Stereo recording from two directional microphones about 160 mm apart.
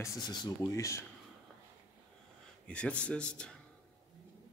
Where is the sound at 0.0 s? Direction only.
25° left (ahead or behind).